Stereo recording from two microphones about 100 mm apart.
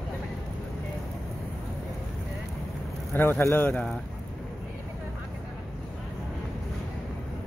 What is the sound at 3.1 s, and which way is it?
Speech, 20° left (ahead or behind).